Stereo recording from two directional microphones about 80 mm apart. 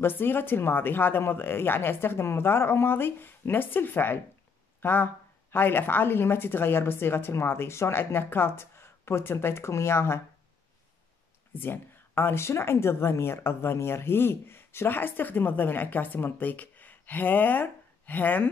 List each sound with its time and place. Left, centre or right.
0.0 s speech: left
11.5 s speech: left